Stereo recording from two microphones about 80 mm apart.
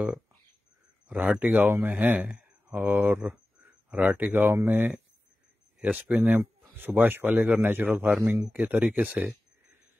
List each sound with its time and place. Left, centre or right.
1.0 s speech: centre
8.5 s speech: centre